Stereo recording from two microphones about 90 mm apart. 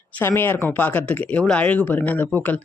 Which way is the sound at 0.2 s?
25° left (ahead or behind).